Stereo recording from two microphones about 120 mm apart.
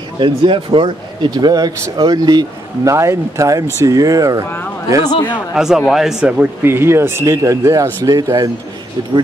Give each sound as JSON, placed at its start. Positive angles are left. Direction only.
{"t": 0.2, "sound": "speech", "side_deg": -45}
{"t": 5.5, "sound": "speech", "side_deg": -5}